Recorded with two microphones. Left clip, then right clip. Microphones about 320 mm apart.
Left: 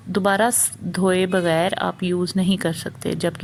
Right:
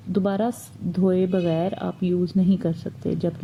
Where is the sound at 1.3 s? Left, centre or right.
Left.